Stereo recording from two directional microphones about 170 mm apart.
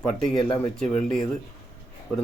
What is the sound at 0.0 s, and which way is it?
Speech, 5° left (ahead or behind).